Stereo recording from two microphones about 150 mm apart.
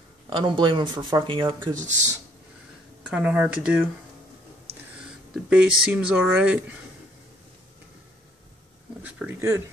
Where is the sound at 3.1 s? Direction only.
5° right (ahead or behind).